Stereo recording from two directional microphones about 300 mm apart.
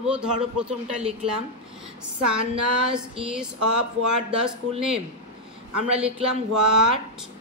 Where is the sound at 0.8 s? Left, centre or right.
Centre.